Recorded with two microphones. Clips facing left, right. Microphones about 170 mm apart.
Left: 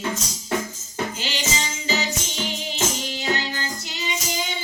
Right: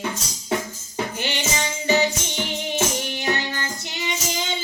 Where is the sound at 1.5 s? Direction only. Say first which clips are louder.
Right 9 dB; 60° right (ahead or behind).